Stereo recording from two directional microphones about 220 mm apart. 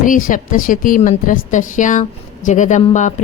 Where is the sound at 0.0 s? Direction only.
40° left (ahead or behind).